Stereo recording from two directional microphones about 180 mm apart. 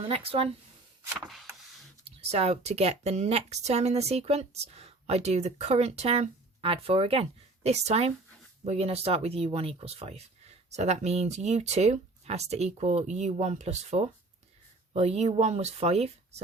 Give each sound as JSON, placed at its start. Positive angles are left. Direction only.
{"t": 0.0, "sound": "speech", "side_deg": -35}
{"t": 1.3, "sound": "a sound", "side_deg": 0}
{"t": 2.0, "sound": "speech", "side_deg": -35}